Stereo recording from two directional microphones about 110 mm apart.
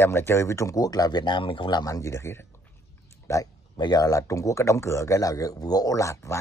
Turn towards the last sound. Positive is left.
turn(degrees=25)  # may be behind; listen again after turning